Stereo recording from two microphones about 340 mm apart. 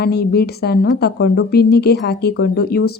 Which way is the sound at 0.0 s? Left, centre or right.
Left.